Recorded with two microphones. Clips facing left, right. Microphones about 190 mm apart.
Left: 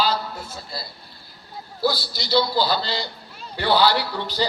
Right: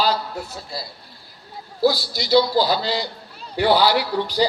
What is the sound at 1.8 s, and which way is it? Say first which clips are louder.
Speech: right 5 dB; 40° right (ahead or behind).